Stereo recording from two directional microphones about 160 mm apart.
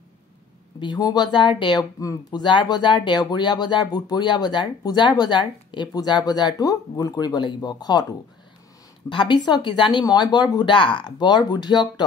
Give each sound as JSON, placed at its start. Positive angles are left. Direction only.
{"t": 0.7, "sound": "speech", "side_deg": 25}